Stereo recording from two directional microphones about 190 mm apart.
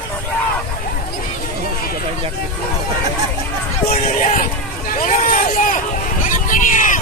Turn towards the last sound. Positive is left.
turn(degrees=45)  # may be behind; listen again after turning